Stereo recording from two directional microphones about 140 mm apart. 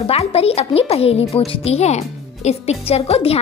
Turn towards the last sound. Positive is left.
turn(degrees=45)  # may be behind; listen again after turning